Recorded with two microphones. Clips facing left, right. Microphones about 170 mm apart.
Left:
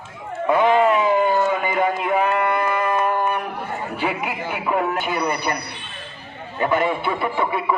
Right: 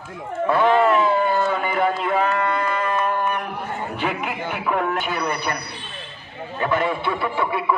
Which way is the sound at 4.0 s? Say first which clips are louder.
Left 1 dB; 10° left (ahead or behind).